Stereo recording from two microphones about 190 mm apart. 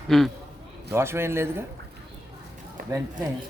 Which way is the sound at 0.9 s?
15° right (ahead or behind).